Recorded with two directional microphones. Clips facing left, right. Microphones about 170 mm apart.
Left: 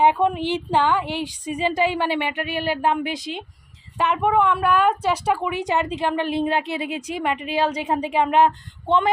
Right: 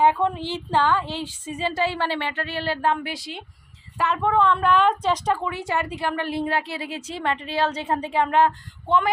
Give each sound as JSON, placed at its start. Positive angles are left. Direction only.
{"t": 0.0, "sound": "a woman's voice", "side_deg": 15}